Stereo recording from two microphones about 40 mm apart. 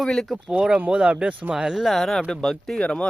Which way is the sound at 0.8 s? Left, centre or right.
Right.